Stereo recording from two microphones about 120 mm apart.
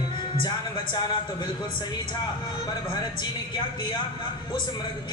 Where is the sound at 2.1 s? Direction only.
40° left (ahead or behind).